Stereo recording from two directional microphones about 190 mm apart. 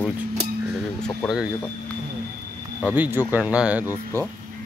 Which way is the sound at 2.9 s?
10° right (ahead or behind).